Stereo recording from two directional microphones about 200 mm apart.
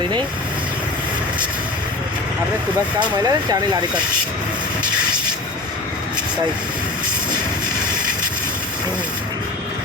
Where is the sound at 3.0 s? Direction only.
20° right (ahead or behind).